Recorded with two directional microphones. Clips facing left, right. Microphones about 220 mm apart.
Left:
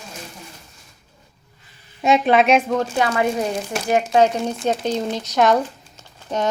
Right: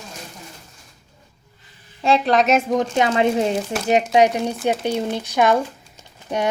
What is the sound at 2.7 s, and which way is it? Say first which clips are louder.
Speech: right 1 dB; 20° right (ahead or behind).